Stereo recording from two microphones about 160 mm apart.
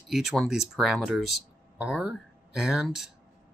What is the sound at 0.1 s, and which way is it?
Speech, centre (ahead or behind).